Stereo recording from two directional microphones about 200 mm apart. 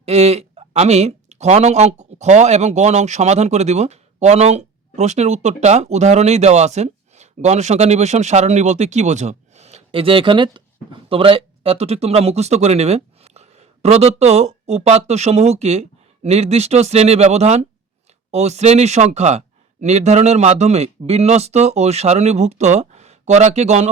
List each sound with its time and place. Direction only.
0.0 s speech: 30° right (ahead or behind)